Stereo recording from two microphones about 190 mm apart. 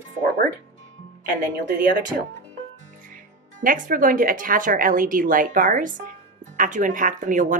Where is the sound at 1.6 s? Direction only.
45° right (ahead or behind).